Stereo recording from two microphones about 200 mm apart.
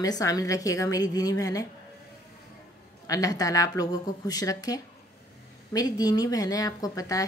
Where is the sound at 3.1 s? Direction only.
15° left (ahead or behind).